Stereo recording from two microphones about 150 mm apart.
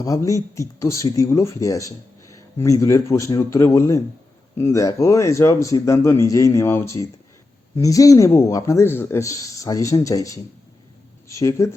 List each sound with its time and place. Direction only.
0.0 s speech: 20° left (ahead or behind)